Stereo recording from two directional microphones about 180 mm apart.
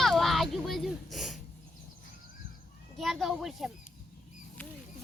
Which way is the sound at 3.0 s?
Centre (ahead or behind).